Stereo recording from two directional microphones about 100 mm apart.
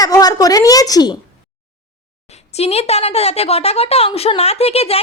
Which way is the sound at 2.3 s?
90° left.